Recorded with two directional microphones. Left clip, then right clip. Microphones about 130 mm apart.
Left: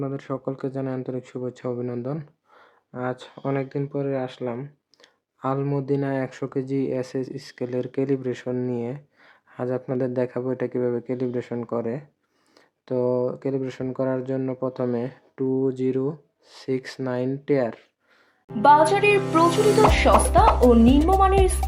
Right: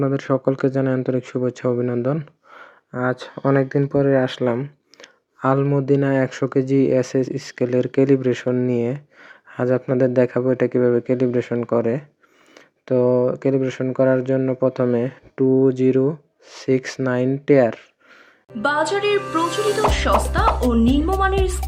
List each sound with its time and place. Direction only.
0.0 s speech: 40° right (ahead or behind)
4.6 s a sound: 30° right (ahead or behind)
5.6 s speech: 25° right (ahead or behind)
18.6 s speech: centre (ahead or behind)